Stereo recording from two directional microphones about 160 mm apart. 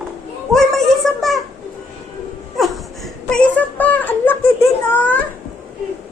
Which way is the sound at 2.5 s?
Centre (ahead or behind).